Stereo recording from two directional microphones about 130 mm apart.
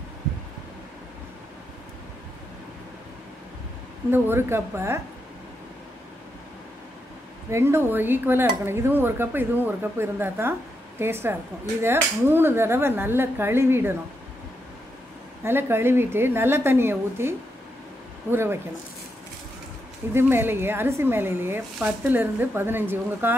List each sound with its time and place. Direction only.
4.1 s a woman's voice: 20° right (ahead or behind)
7.5 s dishes: 20° right (ahead or behind)
15.4 s a woman's voice: 20° right (ahead or behind)
18.3 s dishes: 20° right (ahead or behind)
20.2 s dishes: 15° right (ahead or behind)